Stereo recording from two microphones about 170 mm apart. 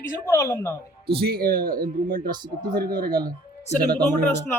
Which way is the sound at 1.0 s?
70° right (ahead or behind).